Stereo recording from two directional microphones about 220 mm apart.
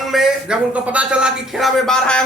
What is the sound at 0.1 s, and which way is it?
A man's voice, centre (ahead or behind).